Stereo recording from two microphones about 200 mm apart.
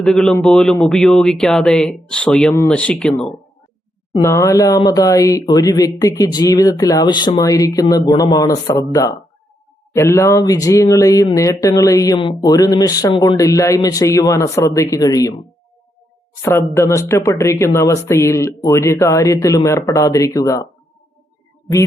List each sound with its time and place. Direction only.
0.0 s speech: 5° left (ahead or behind)